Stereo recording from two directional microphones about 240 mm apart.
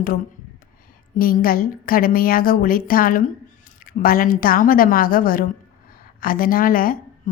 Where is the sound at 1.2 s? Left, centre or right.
Left.